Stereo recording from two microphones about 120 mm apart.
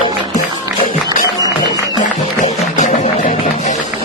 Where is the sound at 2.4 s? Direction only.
75° left (ahead or behind).